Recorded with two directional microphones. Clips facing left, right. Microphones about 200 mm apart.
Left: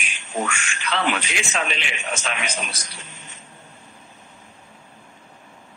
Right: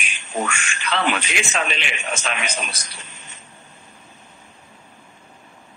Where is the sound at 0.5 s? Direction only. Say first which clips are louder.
Right 1 dB; 65° right (ahead or behind).